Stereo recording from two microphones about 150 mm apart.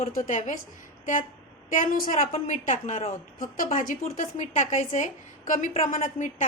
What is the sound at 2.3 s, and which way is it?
A woman's voice, 55° left (ahead or behind).